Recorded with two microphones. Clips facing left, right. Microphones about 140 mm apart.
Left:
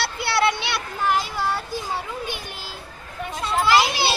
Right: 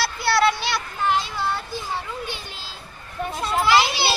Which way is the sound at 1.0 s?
10° left (ahead or behind).